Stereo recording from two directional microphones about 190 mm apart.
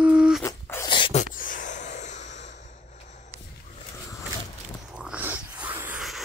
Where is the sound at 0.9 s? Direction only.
25° left (ahead or behind).